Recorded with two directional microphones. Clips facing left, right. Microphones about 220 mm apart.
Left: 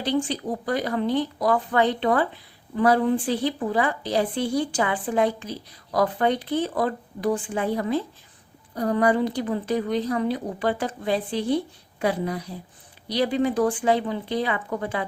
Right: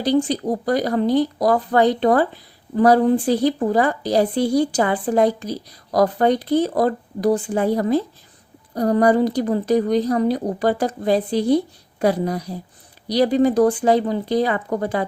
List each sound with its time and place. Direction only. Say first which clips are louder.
0.0 s speech: right 6 dB; 40° right (ahead or behind)